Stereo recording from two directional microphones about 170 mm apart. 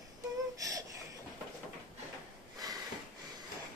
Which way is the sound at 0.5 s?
20° right (ahead or behind).